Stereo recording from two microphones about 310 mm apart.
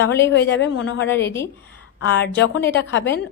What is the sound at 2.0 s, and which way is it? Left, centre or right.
A woman's voice, left.